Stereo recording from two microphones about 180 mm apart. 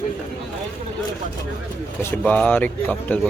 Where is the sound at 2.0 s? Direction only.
10° left (ahead or behind).